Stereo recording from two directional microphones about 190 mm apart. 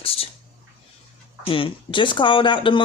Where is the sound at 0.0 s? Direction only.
30° left (ahead or behind).